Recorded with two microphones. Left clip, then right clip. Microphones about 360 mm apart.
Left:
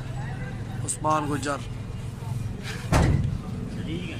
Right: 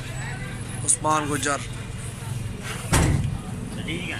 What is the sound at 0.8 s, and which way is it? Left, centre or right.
Speech, centre.